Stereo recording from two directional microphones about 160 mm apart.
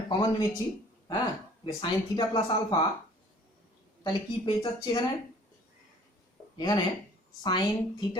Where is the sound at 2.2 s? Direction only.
25° left (ahead or behind).